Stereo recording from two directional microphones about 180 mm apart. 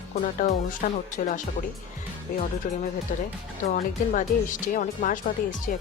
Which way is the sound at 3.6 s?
50° left (ahead or behind).